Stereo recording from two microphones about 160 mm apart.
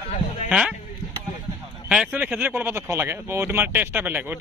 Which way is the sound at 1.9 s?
5° right (ahead or behind).